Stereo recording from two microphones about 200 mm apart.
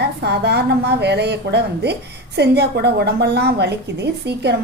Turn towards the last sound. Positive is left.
turn(degrees=-55)  # may be behind; listen again after turning